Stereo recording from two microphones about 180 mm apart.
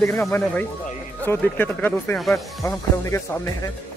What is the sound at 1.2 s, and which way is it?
Speech, 10° left (ahead or behind).